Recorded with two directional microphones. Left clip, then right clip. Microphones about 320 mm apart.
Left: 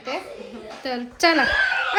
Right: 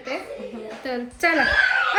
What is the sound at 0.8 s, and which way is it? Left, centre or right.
Speech, centre.